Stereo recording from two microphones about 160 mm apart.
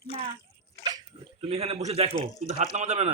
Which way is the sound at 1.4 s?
35° right (ahead or behind).